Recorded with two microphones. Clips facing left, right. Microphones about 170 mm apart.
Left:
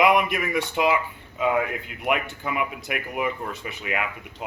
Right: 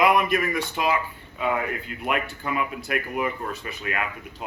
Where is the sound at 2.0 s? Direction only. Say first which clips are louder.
Left 2 dB; 15° left (ahead or behind).